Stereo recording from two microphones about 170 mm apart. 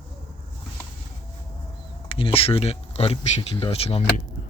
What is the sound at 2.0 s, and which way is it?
Speech, 35° left (ahead or behind).